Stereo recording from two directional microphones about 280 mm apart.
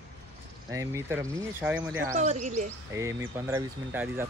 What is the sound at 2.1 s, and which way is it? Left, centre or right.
Speech, right.